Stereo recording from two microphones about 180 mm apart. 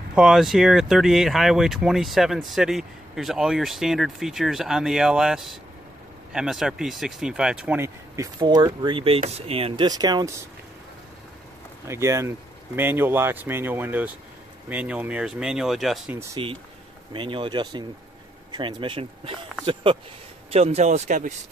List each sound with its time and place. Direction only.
0.1 s speech: centre (ahead or behind); by 10.3 s 20° right (ahead or behind)
11.9 s speech: 15° right (ahead or behind)
17.1 s speech: 30° right (ahead or behind)